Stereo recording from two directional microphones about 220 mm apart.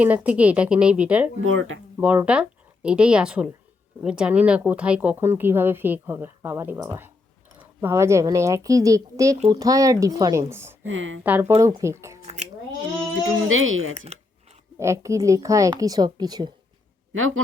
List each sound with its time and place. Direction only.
0.0 s a woman's voice: 5° right (ahead or behind)
1.4 s speech: 65° right (ahead or behind)
2.0 s speech: 5° right (ahead or behind)
10.8 s speech: 60° right (ahead or behind)
11.2 s speech: 10° right (ahead or behind)
13.5 s speech: 65° right (ahead or behind)
14.1 s a sound: 30° right (ahead or behind)
14.8 s speech: 15° right (ahead or behind)
17.1 s speech: 65° right (ahead or behind)